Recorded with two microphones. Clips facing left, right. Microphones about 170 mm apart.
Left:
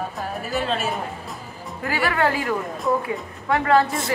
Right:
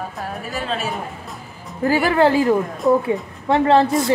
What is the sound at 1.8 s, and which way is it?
A woman's voice, 30° right (ahead or behind).